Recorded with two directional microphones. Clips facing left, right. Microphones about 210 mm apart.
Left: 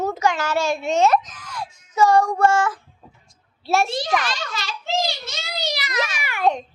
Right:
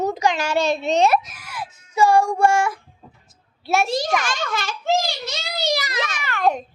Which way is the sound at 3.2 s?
Centre (ahead or behind).